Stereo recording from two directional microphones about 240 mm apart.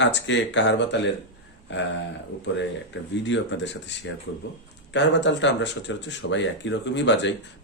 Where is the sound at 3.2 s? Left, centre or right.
Left.